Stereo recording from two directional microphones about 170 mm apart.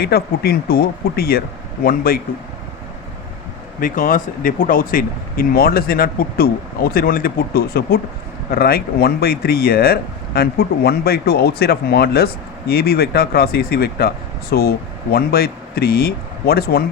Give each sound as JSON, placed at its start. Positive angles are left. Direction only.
{"t": 0.0, "sound": "speech", "side_deg": 65}
{"t": 3.8, "sound": "speech", "side_deg": 50}